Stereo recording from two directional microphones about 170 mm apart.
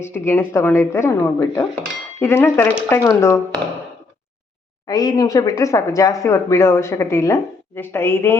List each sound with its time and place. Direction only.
0.0 s speech: 15° left (ahead or behind)
4.9 s speech: 20° left (ahead or behind)